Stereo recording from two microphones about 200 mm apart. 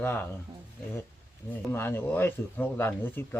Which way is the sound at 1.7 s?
10° left (ahead or behind).